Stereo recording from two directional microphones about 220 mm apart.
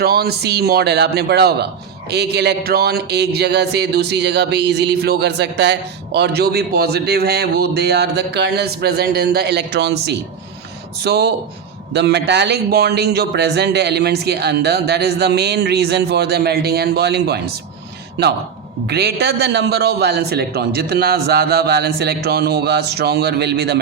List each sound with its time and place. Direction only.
0.0 s a man's voice: 45° right (ahead or behind)
18.9 s a man's voice: 45° right (ahead or behind)